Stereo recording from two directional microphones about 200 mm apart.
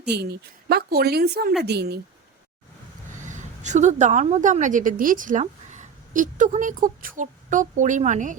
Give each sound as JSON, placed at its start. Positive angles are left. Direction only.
{"t": 0.1, "sound": "a woman's voice", "side_deg": -55}
{"t": 3.2, "sound": "a woman's voice", "side_deg": -35}